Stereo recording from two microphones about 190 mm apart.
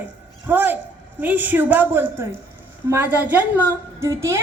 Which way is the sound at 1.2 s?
10° right (ahead or behind).